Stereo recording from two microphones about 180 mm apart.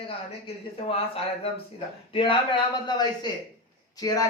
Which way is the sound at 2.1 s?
30° left (ahead or behind).